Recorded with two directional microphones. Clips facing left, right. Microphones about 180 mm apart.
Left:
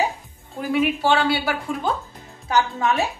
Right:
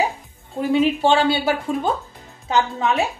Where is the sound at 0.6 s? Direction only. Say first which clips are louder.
Right 4 dB; 25° right (ahead or behind).